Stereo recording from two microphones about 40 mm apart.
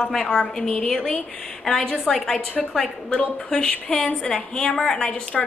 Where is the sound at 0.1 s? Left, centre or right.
Centre.